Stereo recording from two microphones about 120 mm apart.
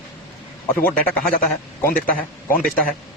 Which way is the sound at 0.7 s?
15° left (ahead or behind).